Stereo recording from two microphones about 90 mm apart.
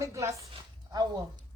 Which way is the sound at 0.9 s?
50° right (ahead or behind).